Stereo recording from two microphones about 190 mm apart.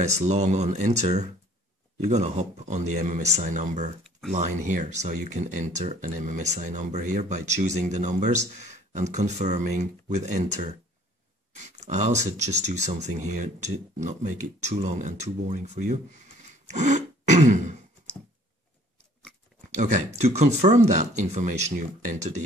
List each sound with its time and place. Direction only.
0.0 s speech: 35° right (ahead or behind)
16.7 s throat clearing: 40° right (ahead or behind)
19.7 s speech: 40° right (ahead or behind)